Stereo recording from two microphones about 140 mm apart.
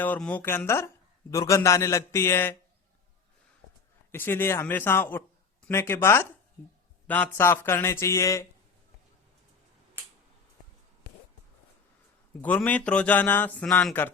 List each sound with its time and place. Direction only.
0.0 s a man's voice: 10° left (ahead or behind)
4.1 s a man's voice: 15° left (ahead or behind)
12.4 s a man's voice: 10° left (ahead or behind)